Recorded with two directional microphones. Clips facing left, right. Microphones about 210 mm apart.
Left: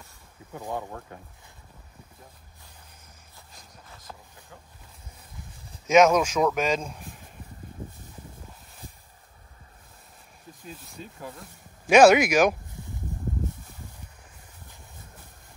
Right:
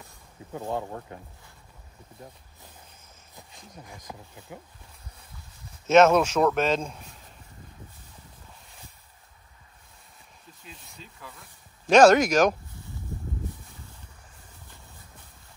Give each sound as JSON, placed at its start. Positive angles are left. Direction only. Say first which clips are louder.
{"t": 0.6, "sound": "speech", "louder": "right 2 dB", "side_deg": -20}
{"t": 3.3, "sound": "speech", "louder": "right 6 dB", "side_deg": -15}
{"t": 5.9, "sound": "speech", "louder": "right 1 dB", "side_deg": 10}
{"t": 11.0, "sound": "speech", "louder": "left 8 dB", "side_deg": 45}
{"t": 11.9, "sound": "speech", "louder": "even", "side_deg": 10}